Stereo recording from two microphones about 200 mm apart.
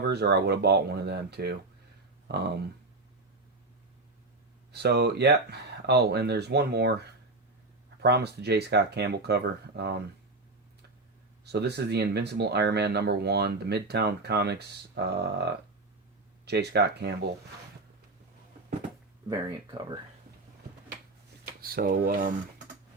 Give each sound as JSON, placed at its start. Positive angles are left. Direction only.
{"t": 0.1, "sound": "speech", "side_deg": -55}
{"t": 4.7, "sound": "speech", "side_deg": -55}
{"t": 11.4, "sound": "speech", "side_deg": -55}
{"t": 16.5, "sound": "speech", "side_deg": -55}
{"t": 19.3, "sound": "speech", "side_deg": -20}
{"t": 21.4, "sound": "speech", "side_deg": -50}